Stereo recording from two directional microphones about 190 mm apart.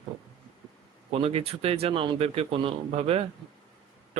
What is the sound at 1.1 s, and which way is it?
Speech, 30° right (ahead or behind).